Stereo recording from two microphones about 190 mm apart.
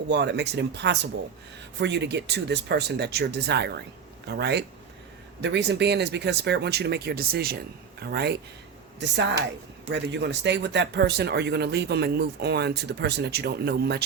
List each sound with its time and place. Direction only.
0.1 s speech: 65° right (ahead or behind)